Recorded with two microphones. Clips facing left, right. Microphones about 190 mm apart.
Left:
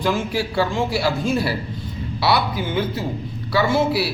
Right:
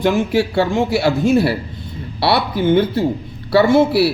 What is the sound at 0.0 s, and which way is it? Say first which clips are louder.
A man's voice: right 6 dB; 65° right (ahead or behind).